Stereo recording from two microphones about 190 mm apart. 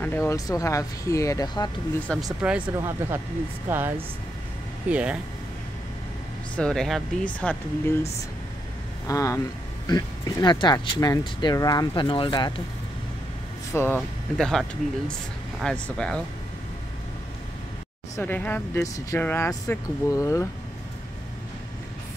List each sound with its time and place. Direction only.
0.0 s speech: 10° left (ahead or behind)
2.1 s speech: 5° left (ahead or behind)
2.4 s speech: 5° right (ahead or behind)
6.5 s speech: 5° left (ahead or behind)
9.0 s speech: 15° left (ahead or behind)
13.7 s speech: 5° left (ahead or behind)
18.1 s speech: 10° left (ahead or behind)